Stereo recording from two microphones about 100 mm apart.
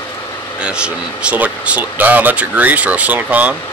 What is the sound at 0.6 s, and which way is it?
Speech, 10° right (ahead or behind).